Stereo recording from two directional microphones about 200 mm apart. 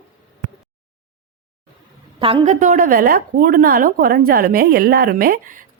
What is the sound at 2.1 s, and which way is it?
A woman's voice, 25° right (ahead or behind).